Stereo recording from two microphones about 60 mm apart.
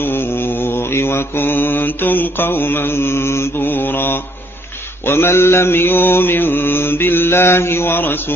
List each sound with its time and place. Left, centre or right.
0.0 s mantra: left